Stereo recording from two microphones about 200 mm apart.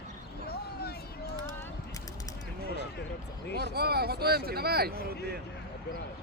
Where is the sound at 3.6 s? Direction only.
50° right (ahead or behind).